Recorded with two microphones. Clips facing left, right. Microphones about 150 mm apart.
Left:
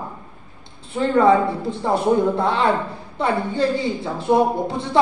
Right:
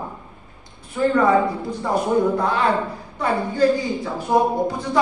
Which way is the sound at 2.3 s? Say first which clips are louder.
Left 1 dB; 25° left (ahead or behind).